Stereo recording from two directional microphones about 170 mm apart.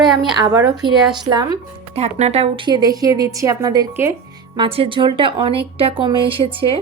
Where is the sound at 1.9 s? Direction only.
40° right (ahead or behind).